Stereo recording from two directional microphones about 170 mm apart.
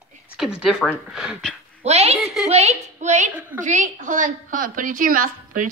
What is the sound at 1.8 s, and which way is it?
A woman's voice, 40° right (ahead or behind).